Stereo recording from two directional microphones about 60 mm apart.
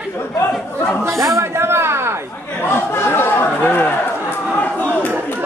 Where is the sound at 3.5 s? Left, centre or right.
Left.